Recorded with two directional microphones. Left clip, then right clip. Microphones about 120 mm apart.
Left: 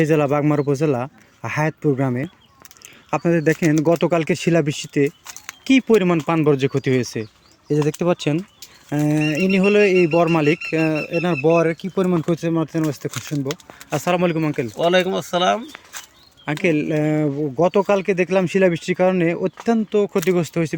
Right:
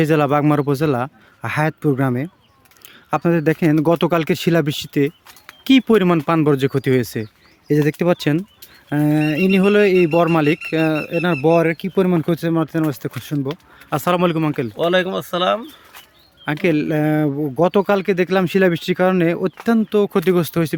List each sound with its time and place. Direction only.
0.0 s speech: 35° right (ahead or behind)
7.9 s speech: 60° right (ahead or behind)
8.9 s speech: 35° right (ahead or behind)
11.4 s speech: 55° right (ahead or behind); by 14.7 s 40° right (ahead or behind)
14.8 s speech: 20° right (ahead or behind)
16.5 s speech: 35° right (ahead or behind)